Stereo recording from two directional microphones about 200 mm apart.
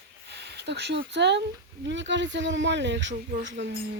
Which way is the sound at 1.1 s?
60° right (ahead or behind).